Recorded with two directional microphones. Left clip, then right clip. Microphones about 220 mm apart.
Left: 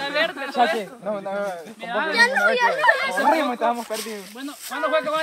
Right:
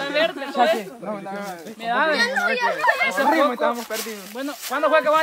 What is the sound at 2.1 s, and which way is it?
Speech, 10° left (ahead or behind).